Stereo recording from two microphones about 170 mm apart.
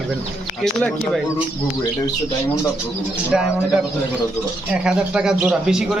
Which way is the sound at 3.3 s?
5° right (ahead or behind).